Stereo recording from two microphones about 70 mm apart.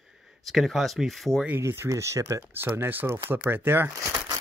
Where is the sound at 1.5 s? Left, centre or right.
Right.